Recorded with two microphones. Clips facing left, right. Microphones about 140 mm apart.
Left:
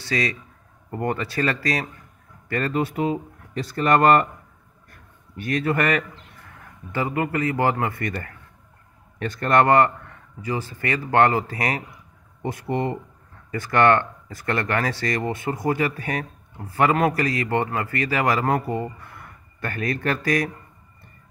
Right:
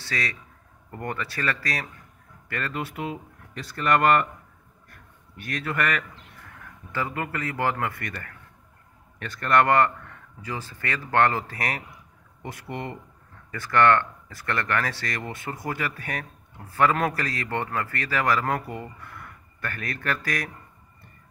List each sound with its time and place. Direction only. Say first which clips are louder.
0.1 s speech: left 6 dB; 20° left (ahead or behind)
2.5 s speech: left 8 dB; 35° left (ahead or behind)
5.5 s speech: left 6 dB; 40° left (ahead or behind)
6.9 s speech: left 6 dB; 15° left (ahead or behind)
8.0 s speech: left 8 dB; 35° left (ahead or behind)
9.4 s speech: left 3 dB; 30° left (ahead or behind)
9.7 s a man's voice: left 4 dB; 20° left (ahead or behind)
12.6 s speech: left 9 dB; 40° left (ahead or behind)
13.5 s speech: left 2 dB; 15° left (ahead or behind)
16.7 s a man's voice: left 3 dB; 15° left (ahead or behind)